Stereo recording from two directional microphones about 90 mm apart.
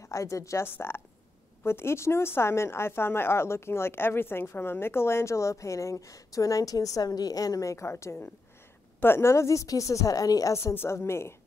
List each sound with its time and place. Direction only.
0.0 s a woman's voice: 35° left (ahead or behind)